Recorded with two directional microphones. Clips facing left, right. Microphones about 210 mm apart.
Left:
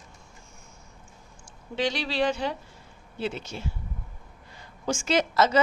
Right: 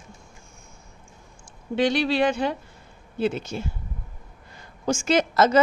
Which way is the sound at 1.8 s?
55° right (ahead or behind).